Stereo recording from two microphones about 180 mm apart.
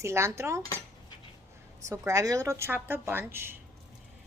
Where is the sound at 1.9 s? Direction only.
15° right (ahead or behind).